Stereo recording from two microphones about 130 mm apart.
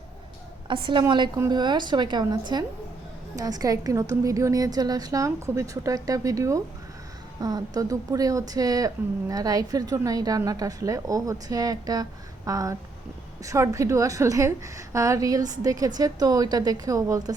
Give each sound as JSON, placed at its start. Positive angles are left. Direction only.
{"t": 0.7, "sound": "a woman's voice", "side_deg": -40}